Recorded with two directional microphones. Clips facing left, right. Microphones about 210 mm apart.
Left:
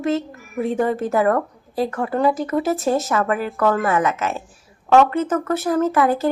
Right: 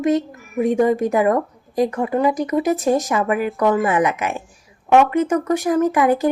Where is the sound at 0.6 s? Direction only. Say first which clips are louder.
Right 4 dB; 15° right (ahead or behind).